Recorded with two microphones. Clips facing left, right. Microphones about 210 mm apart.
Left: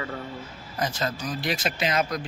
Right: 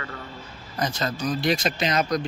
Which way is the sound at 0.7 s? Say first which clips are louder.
Right 1 dB; 5° left (ahead or behind).